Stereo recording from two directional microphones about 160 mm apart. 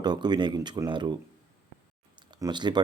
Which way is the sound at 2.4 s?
25° right (ahead or behind).